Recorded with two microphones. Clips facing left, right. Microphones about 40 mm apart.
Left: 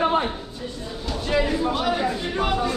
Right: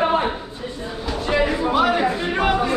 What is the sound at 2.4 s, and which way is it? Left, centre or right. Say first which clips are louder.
Chatter: right 4 dB; right.